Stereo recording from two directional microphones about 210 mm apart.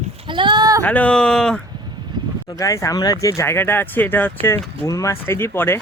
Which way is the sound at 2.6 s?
15° left (ahead or behind).